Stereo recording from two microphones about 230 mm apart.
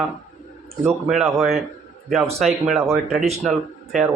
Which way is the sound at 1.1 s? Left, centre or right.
Centre.